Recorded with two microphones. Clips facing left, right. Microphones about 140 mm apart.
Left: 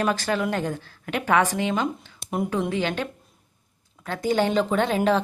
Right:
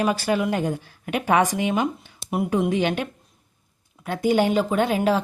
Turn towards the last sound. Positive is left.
turn(degrees=-5)  # may be behind; listen again after turning